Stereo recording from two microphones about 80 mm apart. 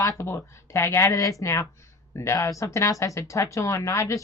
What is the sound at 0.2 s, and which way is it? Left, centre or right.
Speech, left.